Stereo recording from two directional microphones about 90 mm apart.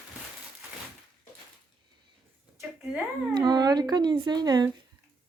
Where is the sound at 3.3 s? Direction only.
50° right (ahead or behind).